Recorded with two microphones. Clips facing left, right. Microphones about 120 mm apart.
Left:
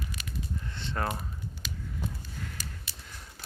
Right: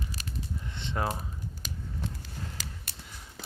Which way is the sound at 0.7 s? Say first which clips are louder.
Right 1 dB; 20° right (ahead or behind).